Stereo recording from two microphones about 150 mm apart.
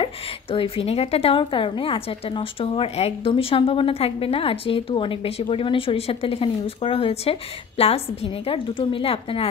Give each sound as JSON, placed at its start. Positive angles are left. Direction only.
{"t": 0.0, "sound": "a woman's voice", "side_deg": 35}